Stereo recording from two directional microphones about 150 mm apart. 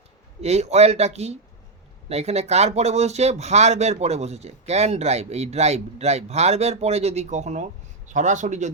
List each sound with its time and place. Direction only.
0.4 s speech: 45° right (ahead or behind)